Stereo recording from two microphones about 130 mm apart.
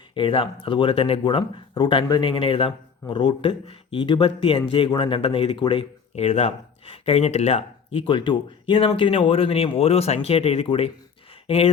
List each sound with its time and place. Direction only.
0.1 s speech: 40° left (ahead or behind)
6.1 s speech: 55° left (ahead or behind)